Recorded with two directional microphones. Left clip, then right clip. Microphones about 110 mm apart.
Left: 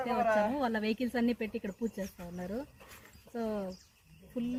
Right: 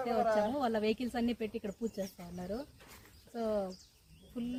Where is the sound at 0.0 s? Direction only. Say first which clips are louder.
Left 2 dB; 30° right (ahead or behind).